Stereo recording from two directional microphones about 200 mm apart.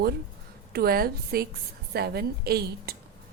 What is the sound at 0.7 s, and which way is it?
A woman's voice, 50° right (ahead or behind).